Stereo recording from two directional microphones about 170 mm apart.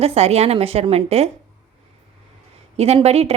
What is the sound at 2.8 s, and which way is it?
Speech, 35° right (ahead or behind).